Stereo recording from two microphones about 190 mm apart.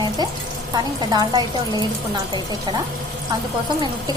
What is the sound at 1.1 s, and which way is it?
Speech, 20° right (ahead or behind).